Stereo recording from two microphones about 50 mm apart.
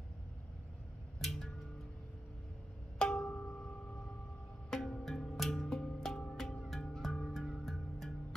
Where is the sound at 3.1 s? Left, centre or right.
Left.